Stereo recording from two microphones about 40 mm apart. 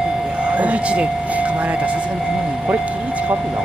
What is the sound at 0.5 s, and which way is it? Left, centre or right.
Speech, right.